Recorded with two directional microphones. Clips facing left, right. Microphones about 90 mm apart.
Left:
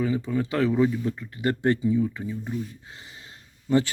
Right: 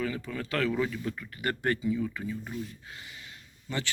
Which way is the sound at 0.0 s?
20° left (ahead or behind).